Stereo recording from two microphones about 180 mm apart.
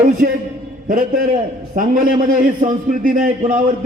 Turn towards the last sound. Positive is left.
turn(degrees=-50)  # may be behind; listen again after turning